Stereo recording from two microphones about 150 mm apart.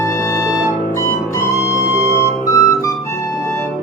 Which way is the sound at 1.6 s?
20° left (ahead or behind).